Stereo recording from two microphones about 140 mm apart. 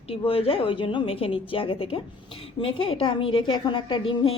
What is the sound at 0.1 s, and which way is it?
A woman's voice, 40° left (ahead or behind).